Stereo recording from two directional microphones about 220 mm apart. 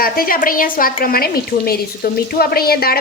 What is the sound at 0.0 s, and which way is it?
Speech, 40° left (ahead or behind).